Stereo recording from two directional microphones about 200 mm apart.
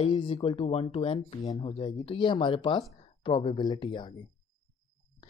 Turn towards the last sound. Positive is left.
turn(degrees=25)  # may be behind; listen again after turning